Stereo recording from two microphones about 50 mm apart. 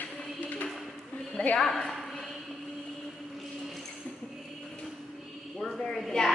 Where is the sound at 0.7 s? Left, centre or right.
Centre.